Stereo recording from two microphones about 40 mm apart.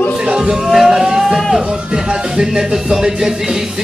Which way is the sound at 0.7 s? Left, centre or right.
Centre.